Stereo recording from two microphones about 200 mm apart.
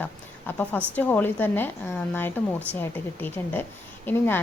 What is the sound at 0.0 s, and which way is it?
A woman's voice, 10° left (ahead or behind).